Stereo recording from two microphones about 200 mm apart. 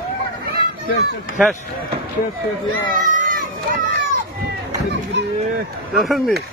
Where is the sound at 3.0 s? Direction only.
40° right (ahead or behind).